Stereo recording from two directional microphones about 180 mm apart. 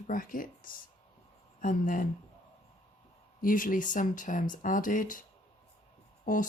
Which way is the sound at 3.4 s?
50° left (ahead or behind).